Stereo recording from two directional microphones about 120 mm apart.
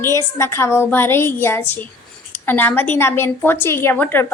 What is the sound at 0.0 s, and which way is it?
A woman's voice, 25° left (ahead or behind).